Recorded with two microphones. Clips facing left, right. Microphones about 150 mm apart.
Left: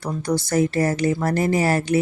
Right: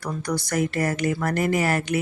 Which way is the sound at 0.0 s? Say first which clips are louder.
Left 4 dB; 25° left (ahead or behind).